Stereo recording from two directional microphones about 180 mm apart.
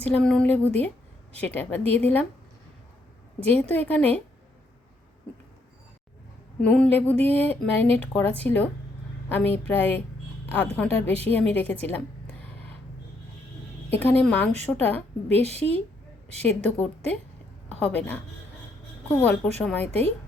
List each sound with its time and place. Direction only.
0.0 s a woman's voice: 5° left (ahead or behind)
3.4 s a woman's voice: 10° left (ahead or behind)
6.6 s a woman's voice: 5° left (ahead or behind)
13.9 s a woman's voice: 10° left (ahead or behind)
15.4 s a woman's voice: 35° right (ahead or behind)
16.4 s a woman's voice: 10° left (ahead or behind)